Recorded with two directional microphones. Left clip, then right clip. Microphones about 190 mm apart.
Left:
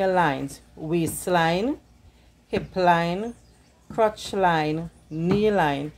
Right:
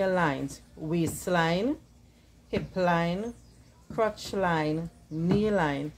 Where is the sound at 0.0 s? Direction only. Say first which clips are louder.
Left 5 dB; 20° left (ahead or behind).